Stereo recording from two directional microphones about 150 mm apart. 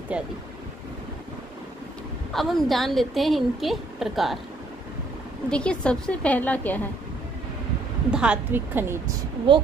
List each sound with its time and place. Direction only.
0.1 s a woman's voice: 10° right (ahead or behind)
2.3 s a woman's voice: centre (ahead or behind)
5.5 s a woman's voice: 5° left (ahead or behind)
8.1 s a woman's voice: 5° right (ahead or behind)